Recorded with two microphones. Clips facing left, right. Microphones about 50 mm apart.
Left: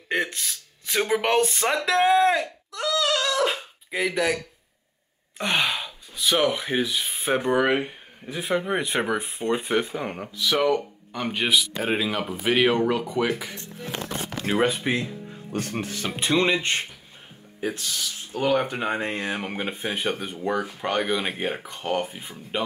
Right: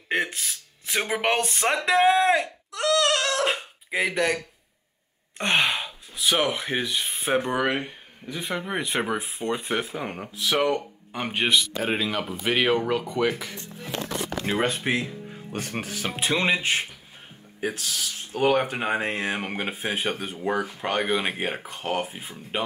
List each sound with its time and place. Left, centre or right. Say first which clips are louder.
0.3 s a sound: even; centre
1.4 s speech: left 1 dB; centre
1.9 s a sound: even; centre
5.4 s gasp: right 1 dB; centre
6.1 s speech: left 1 dB; centre
11.1 s speech: even; right
11.6 s speech: left 1 dB; centre
15.5 s speech: left 2 dB; right
15.8 s speech: even; centre
18.3 s speech: right 1 dB; right
18.6 s speech: right 1 dB; centre